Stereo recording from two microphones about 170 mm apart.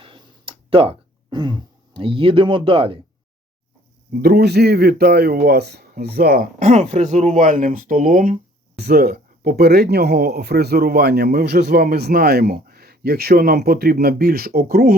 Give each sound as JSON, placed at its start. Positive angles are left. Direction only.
{"t": 0.0, "sound": "throat clearing", "side_deg": -30}
{"t": 4.1, "sound": "speech", "side_deg": -60}
{"t": 6.6, "sound": "speech", "side_deg": -45}
{"t": 8.8, "sound": "speech", "side_deg": -65}